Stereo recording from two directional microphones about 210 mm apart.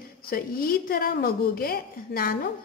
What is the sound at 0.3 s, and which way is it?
A woman's voice, 45° left (ahead or behind).